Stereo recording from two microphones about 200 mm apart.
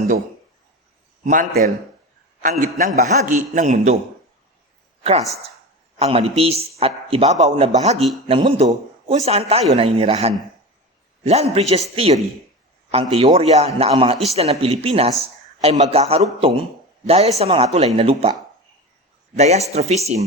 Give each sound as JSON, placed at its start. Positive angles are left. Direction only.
{"t": 1.2, "sound": "a man's voice", "side_deg": -40}
{"t": 6.0, "sound": "a man's voice", "side_deg": -30}
{"t": 19.4, "sound": "a man's voice", "side_deg": -35}